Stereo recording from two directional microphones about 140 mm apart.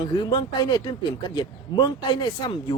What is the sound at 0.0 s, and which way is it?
Speech, 30° left (ahead or behind).